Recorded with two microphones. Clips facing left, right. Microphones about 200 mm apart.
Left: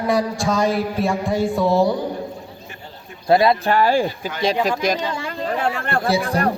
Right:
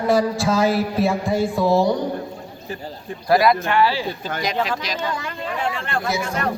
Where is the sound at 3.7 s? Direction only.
45° left (ahead or behind).